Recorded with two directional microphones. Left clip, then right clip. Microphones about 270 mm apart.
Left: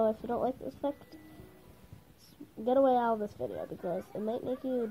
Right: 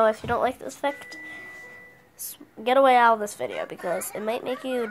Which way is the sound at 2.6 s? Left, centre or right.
Centre.